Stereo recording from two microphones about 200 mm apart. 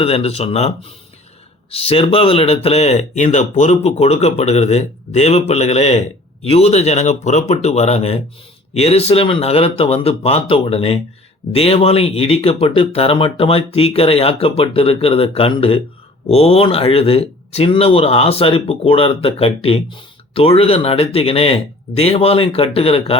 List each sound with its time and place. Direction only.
0.0 s speech: 30° left (ahead or behind)